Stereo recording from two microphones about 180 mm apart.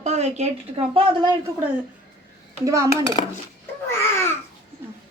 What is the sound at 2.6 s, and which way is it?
Speech, 15° right (ahead or behind).